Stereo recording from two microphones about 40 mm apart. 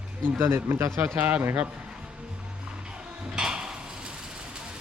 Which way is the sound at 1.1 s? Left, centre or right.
Right.